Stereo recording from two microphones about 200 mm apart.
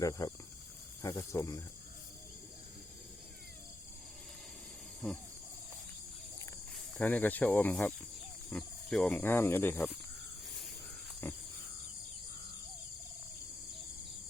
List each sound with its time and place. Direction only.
0.0 s speech: 15° left (ahead or behind)
5.0 s speech: 5° left (ahead or behind)
6.9 s speech: 10° left (ahead or behind)